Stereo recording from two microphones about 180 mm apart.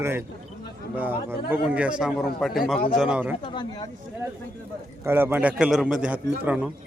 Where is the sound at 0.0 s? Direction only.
15° right (ahead or behind).